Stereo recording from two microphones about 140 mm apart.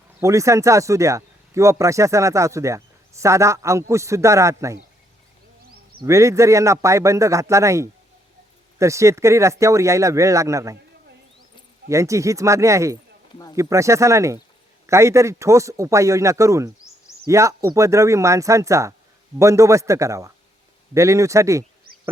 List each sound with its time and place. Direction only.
0.2 s speech: 20° right (ahead or behind)
6.1 s speech: 20° right (ahead or behind)
11.9 s speech: 20° right (ahead or behind)